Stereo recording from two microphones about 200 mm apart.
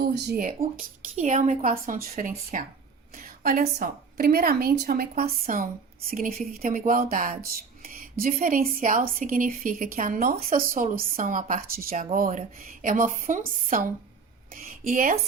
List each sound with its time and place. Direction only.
0.1 s speech: 55° right (ahead or behind)
0.8 s speech: 40° right (ahead or behind)